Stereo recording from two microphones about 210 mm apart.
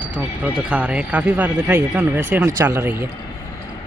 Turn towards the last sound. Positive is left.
turn(degrees=-10)  # may be behind; listen again after turning